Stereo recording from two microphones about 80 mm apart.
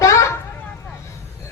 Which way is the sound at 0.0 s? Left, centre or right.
Left.